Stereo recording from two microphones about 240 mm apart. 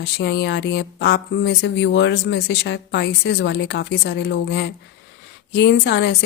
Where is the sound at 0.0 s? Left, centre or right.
Left.